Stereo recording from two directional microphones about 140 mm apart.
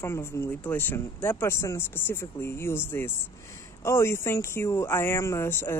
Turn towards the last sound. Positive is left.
turn(degrees=15)  # may be behind; listen again after turning